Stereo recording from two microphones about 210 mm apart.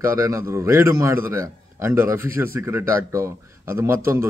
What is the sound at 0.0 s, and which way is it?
A man's voice, 15° right (ahead or behind).